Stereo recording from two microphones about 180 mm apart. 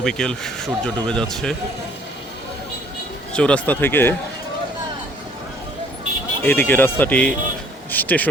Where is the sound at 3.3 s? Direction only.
5° left (ahead or behind).